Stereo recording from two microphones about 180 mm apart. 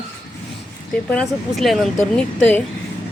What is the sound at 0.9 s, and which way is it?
Speech, 5° left (ahead or behind).